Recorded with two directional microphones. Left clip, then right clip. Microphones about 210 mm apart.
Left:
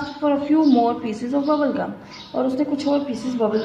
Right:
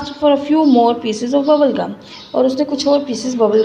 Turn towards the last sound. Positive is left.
turn(degrees=-15)  # may be behind; listen again after turning